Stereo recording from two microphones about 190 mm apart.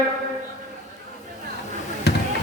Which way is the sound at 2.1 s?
60° left (ahead or behind).